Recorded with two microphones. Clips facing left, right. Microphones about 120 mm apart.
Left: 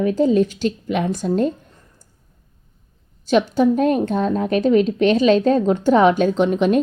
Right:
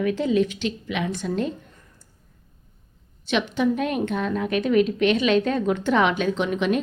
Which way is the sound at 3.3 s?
40° left (ahead or behind).